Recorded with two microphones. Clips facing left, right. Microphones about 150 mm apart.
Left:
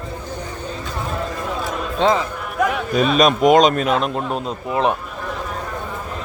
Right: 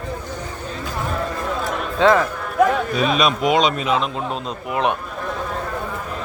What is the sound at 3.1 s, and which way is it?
Speech, 45° left (ahead or behind).